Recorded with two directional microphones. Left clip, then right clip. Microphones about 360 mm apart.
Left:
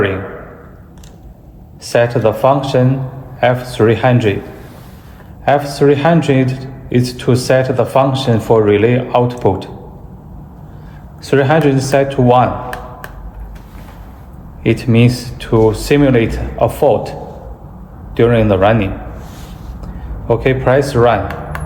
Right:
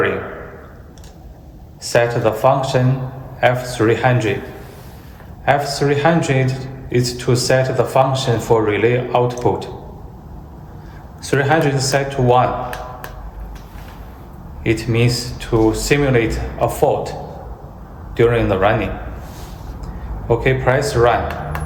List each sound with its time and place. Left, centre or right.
1.8 s a man's voice: centre
5.5 s a man's voice: left
11.2 s a man's voice: centre
14.6 s a man's voice: left
18.2 s a man's voice: left
20.2 s a man's voice: centre